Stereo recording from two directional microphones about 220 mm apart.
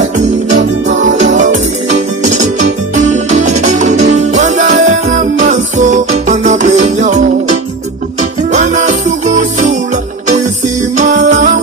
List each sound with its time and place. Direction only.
1.0 s music: 35° right (ahead or behind)
11.0 s music: 35° right (ahead or behind)